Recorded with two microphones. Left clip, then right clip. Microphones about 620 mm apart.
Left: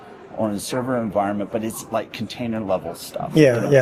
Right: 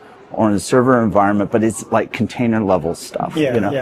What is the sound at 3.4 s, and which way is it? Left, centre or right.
Speech, left.